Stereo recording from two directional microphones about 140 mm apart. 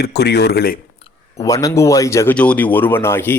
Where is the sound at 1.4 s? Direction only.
25° left (ahead or behind).